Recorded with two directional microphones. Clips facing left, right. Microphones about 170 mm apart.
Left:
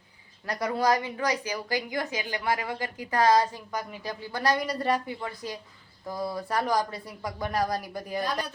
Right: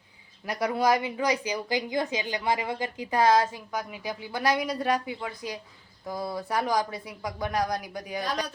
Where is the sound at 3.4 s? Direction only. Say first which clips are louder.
Even; 5° right (ahead or behind).